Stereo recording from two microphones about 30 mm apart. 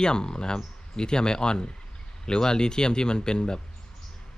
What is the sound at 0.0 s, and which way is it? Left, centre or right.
A man's voice, left.